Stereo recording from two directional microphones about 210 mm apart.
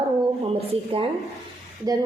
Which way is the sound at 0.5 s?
25° right (ahead or behind).